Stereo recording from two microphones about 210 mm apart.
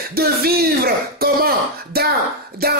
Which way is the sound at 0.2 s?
45° right (ahead or behind).